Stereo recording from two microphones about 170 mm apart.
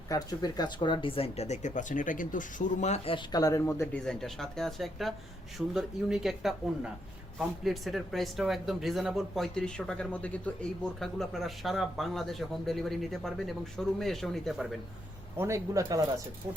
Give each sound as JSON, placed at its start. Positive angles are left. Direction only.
{"t": 0.1, "sound": "speech", "side_deg": 20}
{"t": 4.0, "sound": "speech", "side_deg": 5}
{"t": 15.4, "sound": "speech", "side_deg": -15}